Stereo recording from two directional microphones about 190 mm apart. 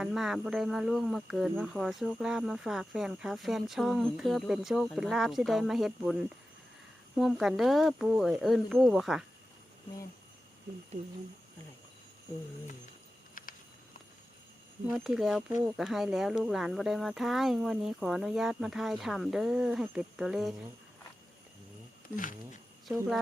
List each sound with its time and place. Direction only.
0.0 s speech: centre (ahead or behind)
13.4 s a sound: 45° left (ahead or behind)
14.8 s speech: centre (ahead or behind)
22.1 s speech: 45° left (ahead or behind)